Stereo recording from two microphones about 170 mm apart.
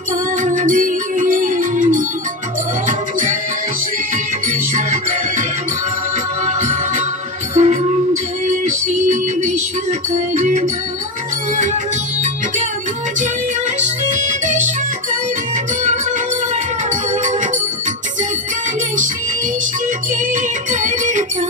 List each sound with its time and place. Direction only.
0.4 s music: 50° right (ahead or behind)
6.4 s music: 40° right (ahead or behind)
13.7 s music: 45° right (ahead or behind)
20.7 s music: 45° right (ahead or behind)